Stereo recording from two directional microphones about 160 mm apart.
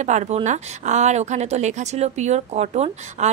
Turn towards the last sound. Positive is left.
turn(degrees=-40)  # may be behind; listen again after turning